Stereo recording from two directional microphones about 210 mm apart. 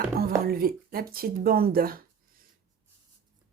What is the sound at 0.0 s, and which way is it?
Speech, 45° right (ahead or behind).